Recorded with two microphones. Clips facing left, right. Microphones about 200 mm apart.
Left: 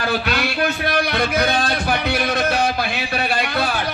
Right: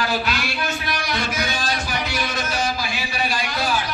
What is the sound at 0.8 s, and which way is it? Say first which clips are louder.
Music: left 6 dB; 60° left (ahead or behind).